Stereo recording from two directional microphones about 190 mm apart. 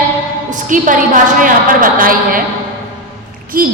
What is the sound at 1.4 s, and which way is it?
A woman's voice, 45° right (ahead or behind).